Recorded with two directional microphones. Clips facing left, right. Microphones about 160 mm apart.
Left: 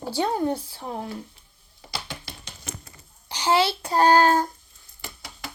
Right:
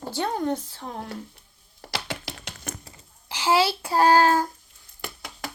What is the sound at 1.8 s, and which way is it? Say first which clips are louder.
Computer keyboard: right 4 dB; 75° right (ahead or behind).